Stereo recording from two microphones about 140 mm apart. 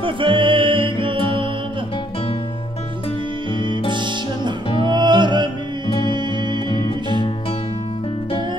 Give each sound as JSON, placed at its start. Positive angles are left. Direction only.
{"t": 0.0, "sound": "music", "side_deg": -35}
{"t": 3.9, "sound": "music", "side_deg": -35}